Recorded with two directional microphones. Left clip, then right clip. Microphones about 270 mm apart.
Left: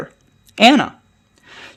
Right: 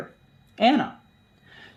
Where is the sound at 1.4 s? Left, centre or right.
Left.